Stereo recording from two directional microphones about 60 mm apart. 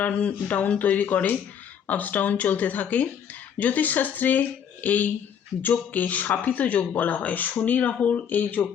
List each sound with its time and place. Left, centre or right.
0.0 s speech: left